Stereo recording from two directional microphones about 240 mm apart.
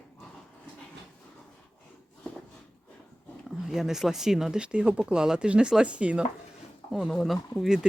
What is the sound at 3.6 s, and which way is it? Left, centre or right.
Speech, centre.